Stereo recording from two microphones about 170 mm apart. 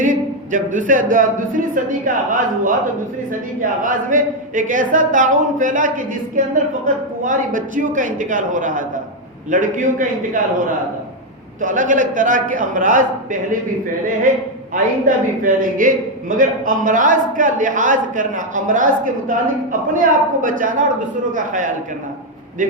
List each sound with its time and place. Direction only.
0.0 s a man's voice: 50° right (ahead or behind)
11.6 s a man's voice: 50° right (ahead or behind)
14.7 s a man's voice: 50° right (ahead or behind)